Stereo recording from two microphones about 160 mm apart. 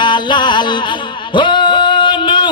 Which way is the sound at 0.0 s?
30° left (ahead or behind).